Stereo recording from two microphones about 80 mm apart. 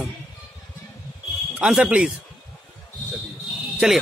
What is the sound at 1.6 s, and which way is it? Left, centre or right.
Speech, centre.